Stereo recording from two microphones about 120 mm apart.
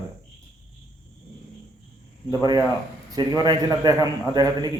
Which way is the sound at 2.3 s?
30° right (ahead or behind).